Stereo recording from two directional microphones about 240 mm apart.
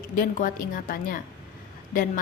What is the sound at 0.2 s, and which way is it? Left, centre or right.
A woman's voice, left.